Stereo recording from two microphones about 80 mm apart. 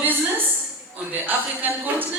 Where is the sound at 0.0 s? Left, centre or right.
Right.